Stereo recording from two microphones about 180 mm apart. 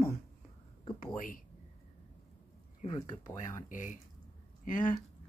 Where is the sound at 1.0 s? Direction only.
50° left (ahead or behind).